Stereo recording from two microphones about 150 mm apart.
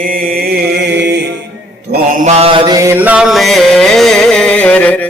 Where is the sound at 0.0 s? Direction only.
70° right (ahead or behind); by 1.2 s 90° right.